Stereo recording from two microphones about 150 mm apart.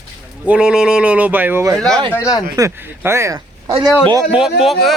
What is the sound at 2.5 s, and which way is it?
Speech, 20° right (ahead or behind).